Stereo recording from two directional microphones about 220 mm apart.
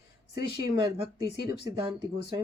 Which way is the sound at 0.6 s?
20° right (ahead or behind).